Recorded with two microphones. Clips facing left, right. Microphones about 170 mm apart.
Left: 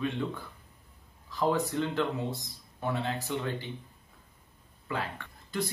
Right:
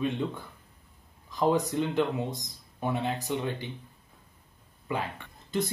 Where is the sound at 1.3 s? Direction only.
20° right (ahead or behind).